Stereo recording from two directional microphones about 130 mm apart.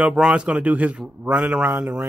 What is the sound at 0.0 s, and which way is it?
Speech, 5° right (ahead or behind).